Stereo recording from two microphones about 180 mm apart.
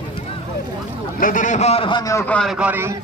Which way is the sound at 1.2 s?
45° left (ahead or behind).